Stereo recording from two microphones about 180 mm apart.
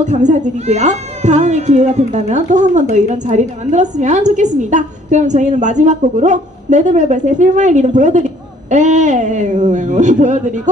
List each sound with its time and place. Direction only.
0.0 s speech: 40° right (ahead or behind)